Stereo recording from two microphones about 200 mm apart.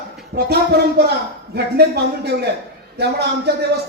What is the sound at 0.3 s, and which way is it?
A woman's voice, 55° right (ahead or behind).